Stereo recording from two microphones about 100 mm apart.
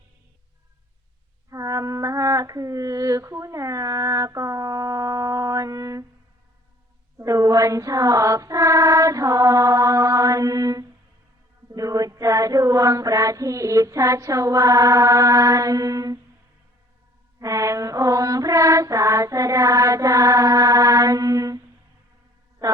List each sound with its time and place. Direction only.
1.5 s female singing: 35° right (ahead or behind)
7.2 s child singing: 35° right (ahead or behind)
11.7 s mantra: 35° right (ahead or behind)
17.4 s mantra: 35° right (ahead or behind)
22.6 s speech: 40° right (ahead or behind)